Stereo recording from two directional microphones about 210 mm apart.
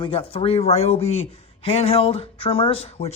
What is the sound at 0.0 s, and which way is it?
Speech, 25° left (ahead or behind).